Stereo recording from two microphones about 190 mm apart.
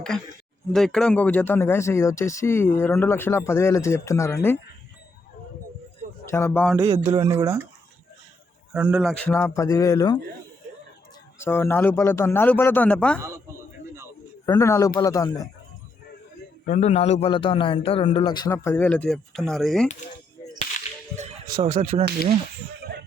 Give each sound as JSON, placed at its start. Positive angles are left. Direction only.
{"t": 0.7, "sound": "speech", "side_deg": 0}
{"t": 6.2, "sound": "speech", "side_deg": 15}
{"t": 6.7, "sound": "speech", "side_deg": -20}
{"t": 8.7, "sound": "a man's voice", "side_deg": -5}
{"t": 9.1, "sound": "speech", "side_deg": 10}
{"t": 11.3, "sound": "speech", "side_deg": 10}
{"t": 13.1, "sound": "speech", "side_deg": -15}
{"t": 14.4, "sound": "speech", "side_deg": 15}
{"t": 16.6, "sound": "a man's voice", "side_deg": 40}
{"t": 21.6, "sound": "speech", "side_deg": -30}